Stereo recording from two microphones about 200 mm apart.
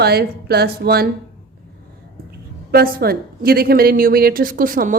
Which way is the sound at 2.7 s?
50° right (ahead or behind).